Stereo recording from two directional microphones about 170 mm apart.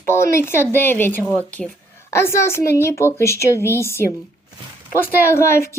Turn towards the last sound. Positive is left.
turn(degrees=15)  # may be behind; listen again after turning